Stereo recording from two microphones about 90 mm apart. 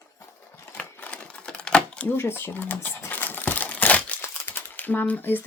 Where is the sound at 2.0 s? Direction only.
25° left (ahead or behind).